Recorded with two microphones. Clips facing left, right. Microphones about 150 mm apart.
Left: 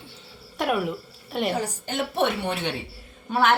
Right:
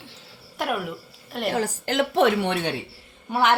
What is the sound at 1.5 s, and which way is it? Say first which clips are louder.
A woman's voice: right 4 dB; 90° right.